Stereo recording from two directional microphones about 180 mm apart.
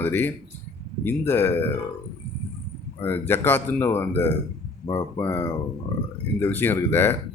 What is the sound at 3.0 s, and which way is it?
Speech, 10° left (ahead or behind).